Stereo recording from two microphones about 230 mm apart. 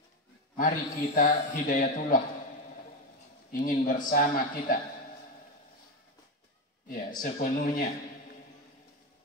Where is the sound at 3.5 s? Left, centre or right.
Left.